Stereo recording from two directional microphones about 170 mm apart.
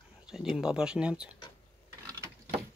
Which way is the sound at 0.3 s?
5° right (ahead or behind).